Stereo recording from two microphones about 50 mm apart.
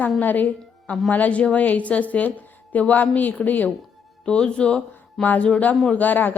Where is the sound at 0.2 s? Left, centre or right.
Left.